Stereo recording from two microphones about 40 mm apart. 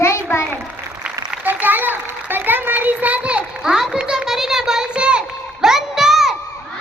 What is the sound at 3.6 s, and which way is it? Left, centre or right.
A child's voice, centre.